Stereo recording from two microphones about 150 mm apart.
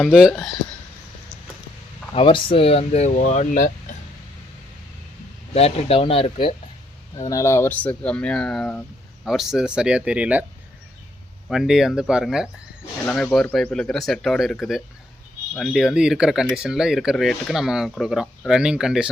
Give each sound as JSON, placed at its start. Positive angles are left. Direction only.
{"t": 0.0, "sound": "speech", "side_deg": -5}
{"t": 2.1, "sound": "speech", "side_deg": 35}
{"t": 5.5, "sound": "speech", "side_deg": 40}
{"t": 7.2, "sound": "speech", "side_deg": 20}
{"t": 11.4, "sound": "speech", "side_deg": 0}